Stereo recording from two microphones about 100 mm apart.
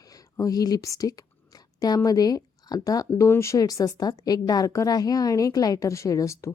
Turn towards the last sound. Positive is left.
turn(degrees=30)  # may be behind; listen again after turning